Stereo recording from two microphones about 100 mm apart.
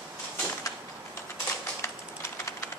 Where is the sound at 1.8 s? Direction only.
30° left (ahead or behind).